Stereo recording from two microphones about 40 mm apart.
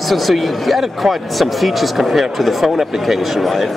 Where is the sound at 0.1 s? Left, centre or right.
Centre.